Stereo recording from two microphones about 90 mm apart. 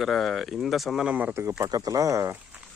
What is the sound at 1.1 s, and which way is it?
Speech, 20° right (ahead or behind).